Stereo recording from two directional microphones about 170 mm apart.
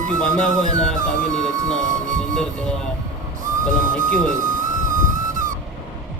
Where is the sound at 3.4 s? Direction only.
50° right (ahead or behind).